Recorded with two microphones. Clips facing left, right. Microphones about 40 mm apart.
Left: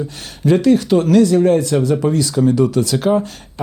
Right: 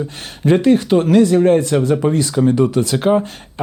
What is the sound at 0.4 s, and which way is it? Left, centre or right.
Speech, right.